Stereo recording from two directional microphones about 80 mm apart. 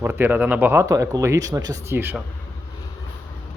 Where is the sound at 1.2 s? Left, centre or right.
Right.